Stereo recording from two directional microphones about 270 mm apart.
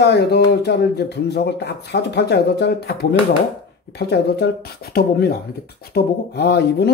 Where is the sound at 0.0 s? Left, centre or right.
Left.